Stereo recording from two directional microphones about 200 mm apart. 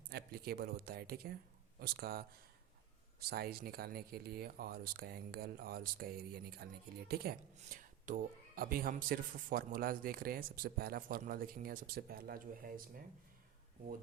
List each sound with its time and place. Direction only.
0.1 s speech: 50° right (ahead or behind)